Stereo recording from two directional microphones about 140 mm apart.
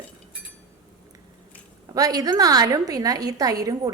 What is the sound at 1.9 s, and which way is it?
A woman's voice, 25° right (ahead or behind).